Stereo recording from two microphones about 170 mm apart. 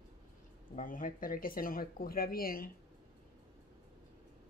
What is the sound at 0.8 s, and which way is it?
Speech, 50° left (ahead or behind).